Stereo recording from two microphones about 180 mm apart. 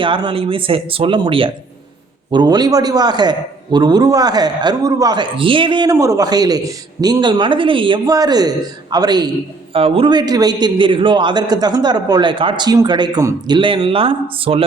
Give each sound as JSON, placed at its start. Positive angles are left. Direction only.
{"t": 0.0, "sound": "a man's voice", "side_deg": -25}